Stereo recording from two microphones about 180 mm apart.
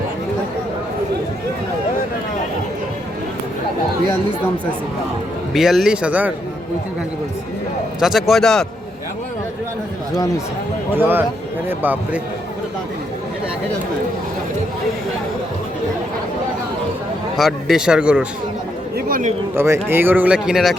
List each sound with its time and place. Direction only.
5.5 s speech: centre (ahead or behind)
7.9 s speech: centre (ahead or behind)
10.9 s speech: 10° right (ahead or behind)
17.3 s speech: centre (ahead or behind)
18.9 s a sound: 50° right (ahead or behind)
19.5 s speech: 15° right (ahead or behind)